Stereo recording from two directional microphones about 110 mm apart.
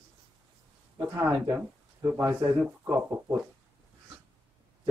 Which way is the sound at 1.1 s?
30° right (ahead or behind).